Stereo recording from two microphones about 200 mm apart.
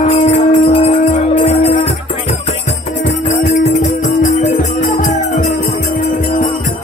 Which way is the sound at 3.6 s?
35° left (ahead or behind).